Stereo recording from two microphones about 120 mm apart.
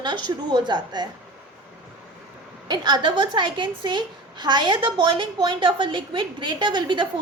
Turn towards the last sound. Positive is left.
turn(degrees=-40)  # may be behind; listen again after turning